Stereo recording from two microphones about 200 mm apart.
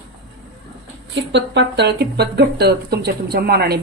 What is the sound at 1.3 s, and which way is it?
Speech, 60° right (ahead or behind).